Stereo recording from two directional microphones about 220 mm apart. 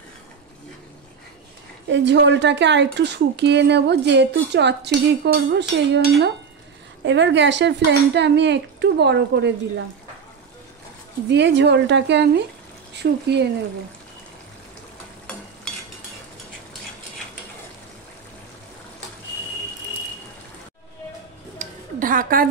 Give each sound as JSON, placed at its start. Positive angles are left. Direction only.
{"t": 1.9, "sound": "speech", "side_deg": -50}
{"t": 11.2, "sound": "speech", "side_deg": -50}
{"t": 21.5, "sound": "a sound", "side_deg": -40}